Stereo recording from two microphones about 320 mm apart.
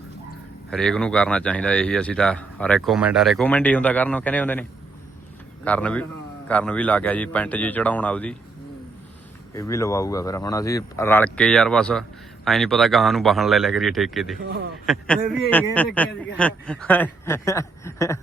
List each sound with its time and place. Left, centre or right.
0.7 s speech: centre
5.6 s speech: centre
9.6 s speech: centre
14.4 s a man's voice: right
14.8 s speech: centre